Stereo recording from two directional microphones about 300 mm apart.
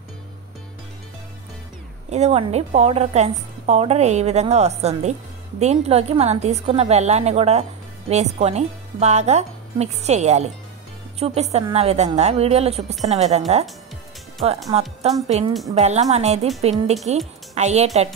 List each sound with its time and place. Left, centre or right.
2.0 s a woman's voice: right
14.7 s a woman's voice: right